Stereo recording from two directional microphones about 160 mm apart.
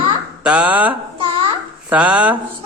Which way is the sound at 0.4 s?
5° right (ahead or behind).